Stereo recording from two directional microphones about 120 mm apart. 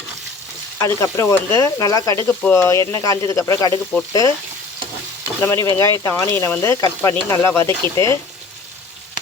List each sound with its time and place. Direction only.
0.8 s speech: 25° left (ahead or behind)
2.2 s speech: 15° left (ahead or behind)
5.4 s speech: 20° left (ahead or behind)